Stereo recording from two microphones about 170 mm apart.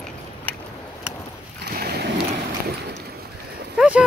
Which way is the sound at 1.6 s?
65° right (ahead or behind).